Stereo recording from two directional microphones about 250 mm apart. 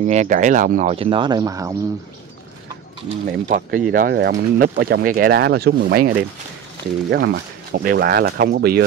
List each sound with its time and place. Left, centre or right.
0.0 s speech: right; by 1.8 s centre
3.3 s speech: right